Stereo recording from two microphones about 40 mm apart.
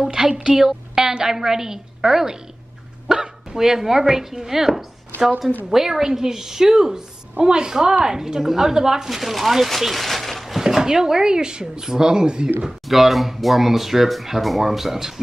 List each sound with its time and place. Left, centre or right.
0.0 s a woman's voice: centre
9.2 s speech: centre
9.7 s a sound: centre
10.8 s speech: centre
12.8 s speech: centre